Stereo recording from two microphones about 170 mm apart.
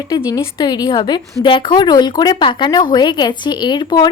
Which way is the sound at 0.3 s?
20° left (ahead or behind).